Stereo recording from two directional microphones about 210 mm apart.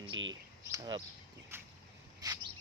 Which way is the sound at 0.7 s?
20° right (ahead or behind).